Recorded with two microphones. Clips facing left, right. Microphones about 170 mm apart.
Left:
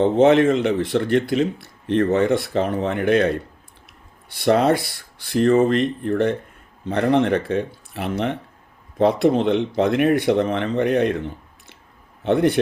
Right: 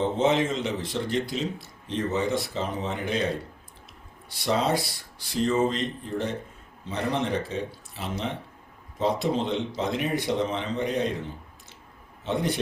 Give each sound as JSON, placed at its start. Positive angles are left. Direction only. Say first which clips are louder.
{"t": 0.0, "sound": "speech", "louder": "left 9 dB", "side_deg": 60}
{"t": 12.2, "sound": "speech", "louder": "left 9 dB", "side_deg": 60}